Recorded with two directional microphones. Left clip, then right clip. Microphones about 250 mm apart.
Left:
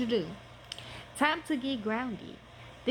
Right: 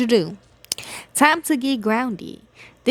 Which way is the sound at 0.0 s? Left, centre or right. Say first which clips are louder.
Right 13 dB; right.